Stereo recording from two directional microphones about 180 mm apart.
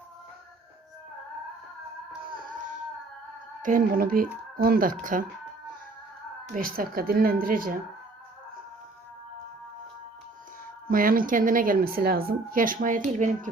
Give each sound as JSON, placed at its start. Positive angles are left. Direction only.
{"t": 2.3, "sound": "music", "side_deg": -50}
{"t": 3.6, "sound": "speech", "side_deg": -50}
{"t": 6.5, "sound": "speech", "side_deg": -55}
{"t": 10.8, "sound": "speech", "side_deg": -50}